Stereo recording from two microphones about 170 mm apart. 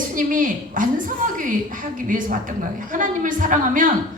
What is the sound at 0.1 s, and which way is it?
Speech, 50° right (ahead or behind).